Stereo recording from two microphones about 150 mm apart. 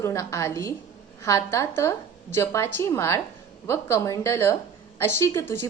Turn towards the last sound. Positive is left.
turn(degrees=20)  # may be behind; listen again after turning